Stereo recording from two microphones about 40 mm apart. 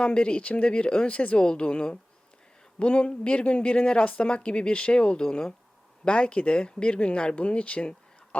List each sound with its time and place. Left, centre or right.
0.0 s speech: left